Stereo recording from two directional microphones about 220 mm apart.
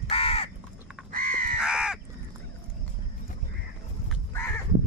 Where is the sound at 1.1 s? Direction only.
40° right (ahead or behind).